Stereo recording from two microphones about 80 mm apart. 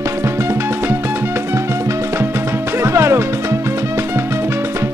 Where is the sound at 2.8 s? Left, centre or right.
Right.